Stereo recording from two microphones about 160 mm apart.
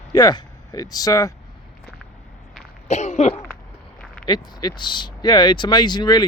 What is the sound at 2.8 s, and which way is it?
Cough, 45° left (ahead or behind).